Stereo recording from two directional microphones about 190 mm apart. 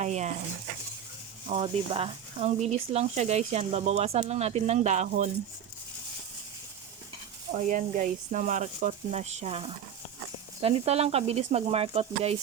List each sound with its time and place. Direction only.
0.0 s a sound: 35° right (ahead or behind)
1.5 s speech: 30° right (ahead or behind)
7.5 s speech: 40° right (ahead or behind)